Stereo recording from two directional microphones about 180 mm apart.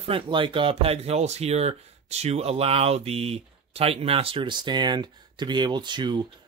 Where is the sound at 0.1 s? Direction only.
30° right (ahead or behind).